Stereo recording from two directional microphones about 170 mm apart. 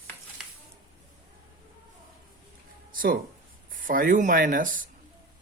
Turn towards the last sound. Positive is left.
turn(degrees=-50)  # may be behind; listen again after turning